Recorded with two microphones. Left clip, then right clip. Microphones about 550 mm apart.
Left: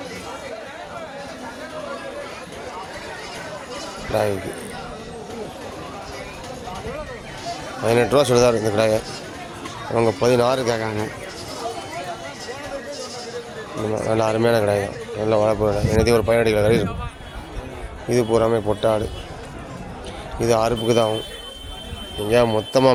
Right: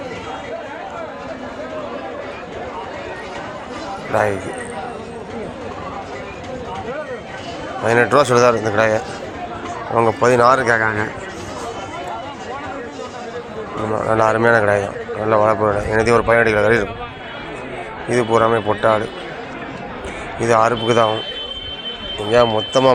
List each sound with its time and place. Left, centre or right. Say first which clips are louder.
7.9 s speech: right 3 dB; left
13.9 s speech: right 5 dB; left
18.1 s speech: right 3 dB; left
20.4 s speech: right 4 dB; left
22.3 s speech: right 3 dB; left